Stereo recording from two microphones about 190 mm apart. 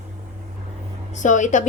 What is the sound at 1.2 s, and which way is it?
Speech, 40° left (ahead or behind).